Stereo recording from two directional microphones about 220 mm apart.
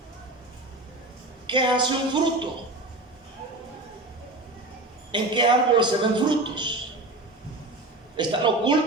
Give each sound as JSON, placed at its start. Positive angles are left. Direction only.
{"t": 1.5, "sound": "a man's voice", "side_deg": -20}
{"t": 5.1, "sound": "a man's voice", "side_deg": -20}
{"t": 8.1, "sound": "a man's voice", "side_deg": -20}